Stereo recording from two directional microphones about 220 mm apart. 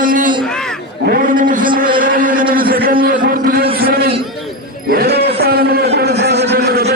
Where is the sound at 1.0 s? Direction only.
40° right (ahead or behind).